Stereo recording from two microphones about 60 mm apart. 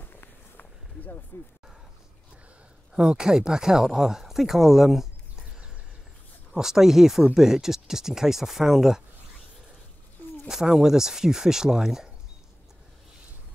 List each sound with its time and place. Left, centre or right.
0.0 s run: left
2.9 s speech: centre
6.5 s speech: centre
10.5 s speech: centre